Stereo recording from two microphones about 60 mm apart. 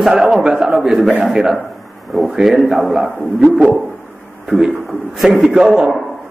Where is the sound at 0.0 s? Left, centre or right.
Centre.